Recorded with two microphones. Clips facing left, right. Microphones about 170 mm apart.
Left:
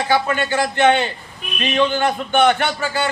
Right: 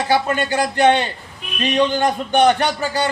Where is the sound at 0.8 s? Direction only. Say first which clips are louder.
Right 1 dB; 35° right (ahead or behind).